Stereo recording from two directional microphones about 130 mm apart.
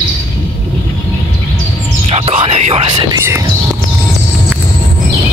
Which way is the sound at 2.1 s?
50° right (ahead or behind).